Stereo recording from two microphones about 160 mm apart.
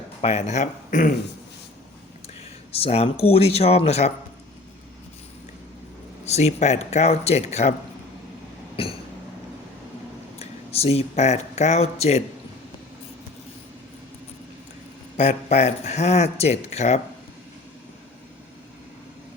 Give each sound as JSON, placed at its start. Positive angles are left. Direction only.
{"t": 0.2, "sound": "speech", "side_deg": 40}
{"t": 2.7, "sound": "speech", "side_deg": 40}
{"t": 6.2, "sound": "speech", "side_deg": 45}
{"t": 8.7, "sound": "a sound", "side_deg": 35}
{"t": 10.3, "sound": "speech", "side_deg": 40}
{"t": 15.1, "sound": "speech", "side_deg": 45}